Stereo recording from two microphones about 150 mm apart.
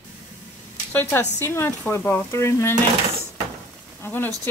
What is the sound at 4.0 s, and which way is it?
Speech, 15° left (ahead or behind).